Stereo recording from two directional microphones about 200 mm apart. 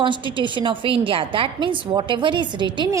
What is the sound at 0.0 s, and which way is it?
A woman's voice, 25° right (ahead or behind).